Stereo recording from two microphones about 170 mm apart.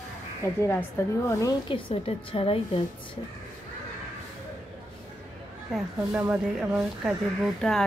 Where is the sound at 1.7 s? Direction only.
30° left (ahead or behind).